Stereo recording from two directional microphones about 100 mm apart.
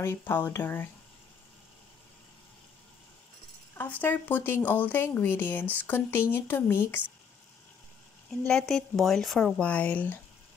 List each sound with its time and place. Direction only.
0.0 s speech: 25° left (ahead or behind)
3.7 s speech: 20° left (ahead or behind)
8.5 s speech: 5° left (ahead or behind)